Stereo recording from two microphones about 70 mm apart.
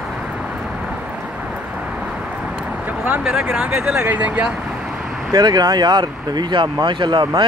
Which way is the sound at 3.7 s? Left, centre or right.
Right.